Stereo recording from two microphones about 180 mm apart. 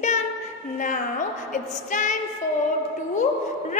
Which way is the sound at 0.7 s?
45° left (ahead or behind).